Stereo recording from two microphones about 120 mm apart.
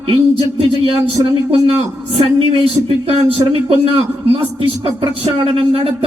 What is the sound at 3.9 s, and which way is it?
Speech, 50° right (ahead or behind).